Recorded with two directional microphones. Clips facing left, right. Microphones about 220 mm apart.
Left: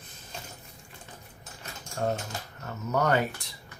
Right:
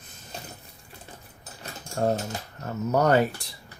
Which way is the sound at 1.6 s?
35° right (ahead or behind).